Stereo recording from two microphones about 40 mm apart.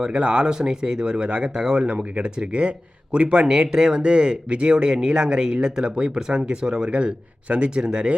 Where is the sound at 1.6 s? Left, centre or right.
Centre.